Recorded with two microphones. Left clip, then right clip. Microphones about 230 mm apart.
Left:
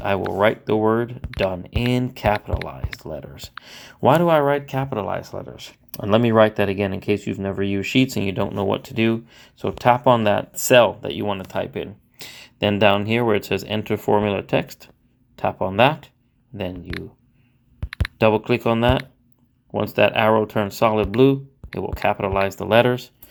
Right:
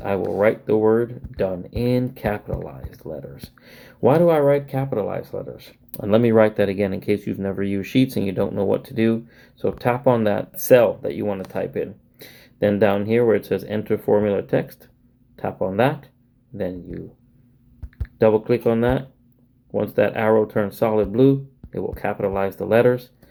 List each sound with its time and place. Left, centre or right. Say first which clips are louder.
0.0 s speech: even; left
18.2 s speech: right 1 dB; left